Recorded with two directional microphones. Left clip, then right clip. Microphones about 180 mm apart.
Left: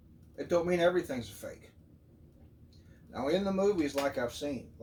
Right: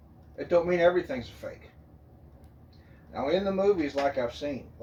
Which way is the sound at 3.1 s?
15° left (ahead or behind).